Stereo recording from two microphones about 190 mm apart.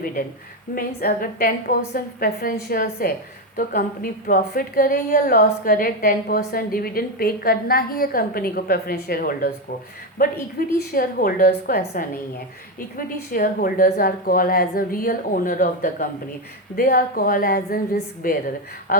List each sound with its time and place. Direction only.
0.8 s a woman's voice: 50° left (ahead or behind)
13.3 s a woman's voice: 50° left (ahead or behind)